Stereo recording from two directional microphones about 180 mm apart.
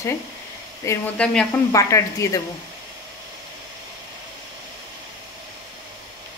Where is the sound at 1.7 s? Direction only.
15° left (ahead or behind).